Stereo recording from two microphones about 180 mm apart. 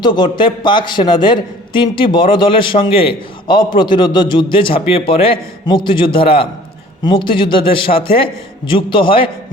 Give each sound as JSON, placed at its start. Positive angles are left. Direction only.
{"t": 0.0, "sound": "a man's voice", "side_deg": 25}